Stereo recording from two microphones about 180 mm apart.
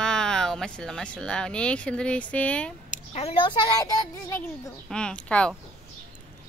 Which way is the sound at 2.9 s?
35° left (ahead or behind).